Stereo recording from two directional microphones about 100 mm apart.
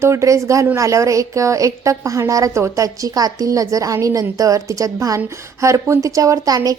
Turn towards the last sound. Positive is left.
turn(degrees=-40)  # may be behind; listen again after turning